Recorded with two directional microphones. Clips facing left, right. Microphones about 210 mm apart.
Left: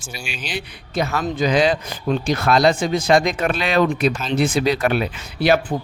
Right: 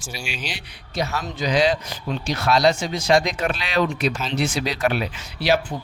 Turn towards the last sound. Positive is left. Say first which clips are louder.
# left 4 dB
turn(degrees=55)  # may be behind; listen again after turning